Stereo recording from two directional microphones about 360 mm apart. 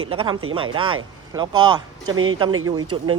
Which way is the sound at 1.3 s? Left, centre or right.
Centre.